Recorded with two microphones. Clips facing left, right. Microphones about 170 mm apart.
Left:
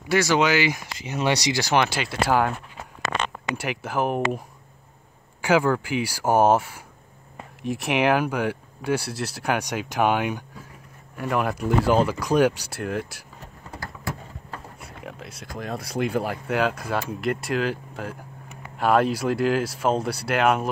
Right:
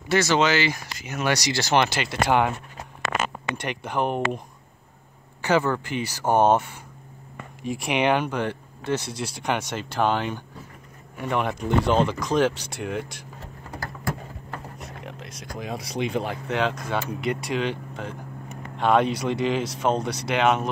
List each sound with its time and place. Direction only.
0.1 s speech: 10° left (ahead or behind)
1.0 s speech: 30° left (ahead or behind)
1.5 s speech: 10° left (ahead or behind)
3.0 s a sound: 5° right (ahead or behind)
3.5 s speech: 5° left (ahead or behind)
5.4 s speech: 10° left (ahead or behind)
14.8 s speech: 5° left (ahead or behind)